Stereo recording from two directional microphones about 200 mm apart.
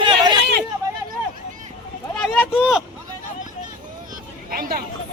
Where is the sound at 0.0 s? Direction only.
20° right (ahead or behind).